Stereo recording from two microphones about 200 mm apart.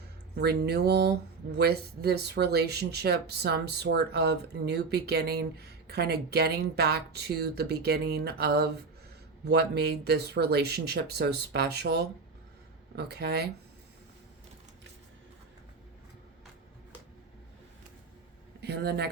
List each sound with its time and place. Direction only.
0.3 s speech: 55° right (ahead or behind)
18.6 s speech: 55° right (ahead or behind)